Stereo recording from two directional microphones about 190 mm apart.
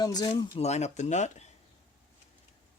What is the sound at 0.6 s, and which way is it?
Speech, 35° left (ahead or behind).